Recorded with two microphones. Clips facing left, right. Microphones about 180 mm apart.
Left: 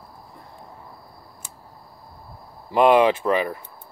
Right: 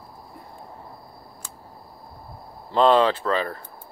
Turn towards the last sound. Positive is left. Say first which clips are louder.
# left 3 dB
turn(degrees=15)  # may be behind; listen again after turning